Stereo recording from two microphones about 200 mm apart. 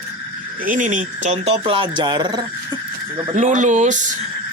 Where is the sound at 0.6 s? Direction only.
40° right (ahead or behind); by 2.4 s 20° right (ahead or behind).